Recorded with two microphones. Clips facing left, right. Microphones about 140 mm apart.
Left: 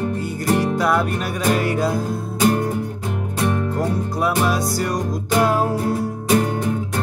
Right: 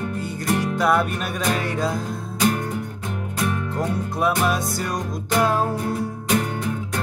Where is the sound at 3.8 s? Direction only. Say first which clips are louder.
Left 2 dB; centre (ahead or behind).